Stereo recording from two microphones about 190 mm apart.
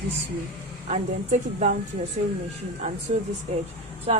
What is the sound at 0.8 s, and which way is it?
Speech, 35° right (ahead or behind).